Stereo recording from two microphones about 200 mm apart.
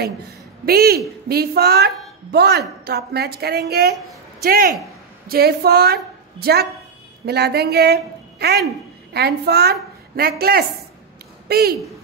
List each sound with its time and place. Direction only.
0.7 s a woman's voice: 50° right (ahead or behind)